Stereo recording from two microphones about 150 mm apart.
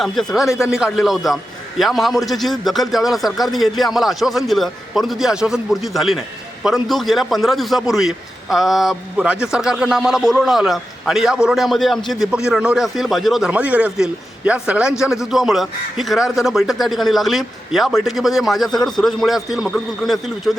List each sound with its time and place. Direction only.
0.0 s a man's voice: centre (ahead or behind)